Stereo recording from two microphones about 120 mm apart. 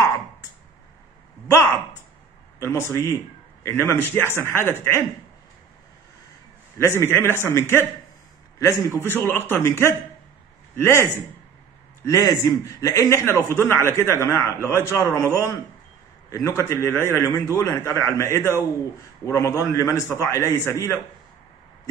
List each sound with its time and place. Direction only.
2.6 s a man's voice: 25° left (ahead or behind)
6.8 s a man's voice: 20° left (ahead or behind)
12.1 s a man's voice: 25° left (ahead or behind)
16.3 s a man's voice: 25° left (ahead or behind)